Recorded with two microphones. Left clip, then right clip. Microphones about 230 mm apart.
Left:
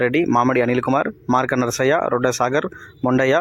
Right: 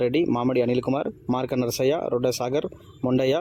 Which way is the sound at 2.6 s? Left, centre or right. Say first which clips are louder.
Left 6 dB; left.